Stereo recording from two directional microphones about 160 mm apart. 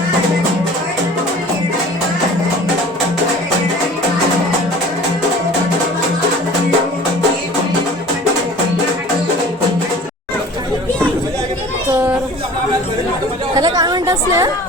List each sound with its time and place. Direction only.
13.6 s chatter: 25° right (ahead or behind)